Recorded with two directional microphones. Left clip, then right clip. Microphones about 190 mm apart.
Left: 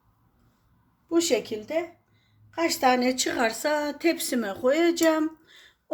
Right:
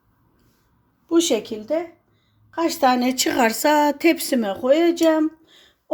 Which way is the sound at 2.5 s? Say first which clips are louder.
Right 4 dB; 20° right (ahead or behind).